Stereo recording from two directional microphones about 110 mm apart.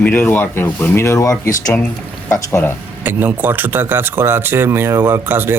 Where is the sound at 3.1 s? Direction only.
15° right (ahead or behind).